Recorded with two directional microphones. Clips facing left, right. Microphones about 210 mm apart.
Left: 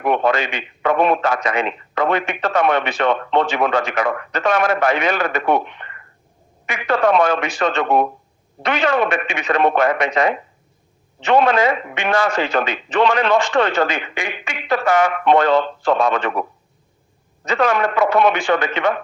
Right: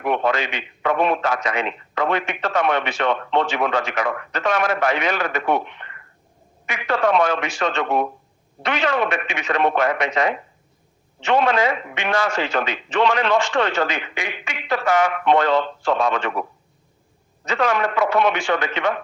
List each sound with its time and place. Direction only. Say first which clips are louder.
0.0 s speech: left 3 dB; 50° left (ahead or behind)
11.3 s speech: left 3 dB; 55° left (ahead or behind)
17.5 s speech: left 3 dB; 50° left (ahead or behind)